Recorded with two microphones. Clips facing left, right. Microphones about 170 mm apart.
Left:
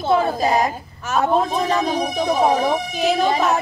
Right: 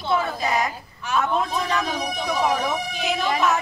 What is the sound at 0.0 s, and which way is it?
Speech, 45° left (ahead or behind).